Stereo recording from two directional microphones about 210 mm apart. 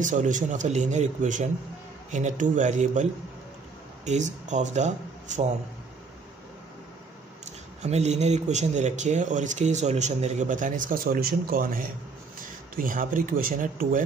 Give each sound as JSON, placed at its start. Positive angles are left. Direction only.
{"t": 0.0, "sound": "speech", "side_deg": -35}
{"t": 7.8, "sound": "speech", "side_deg": -30}